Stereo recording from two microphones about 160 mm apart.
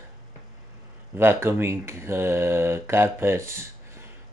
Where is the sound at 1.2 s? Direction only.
15° right (ahead or behind).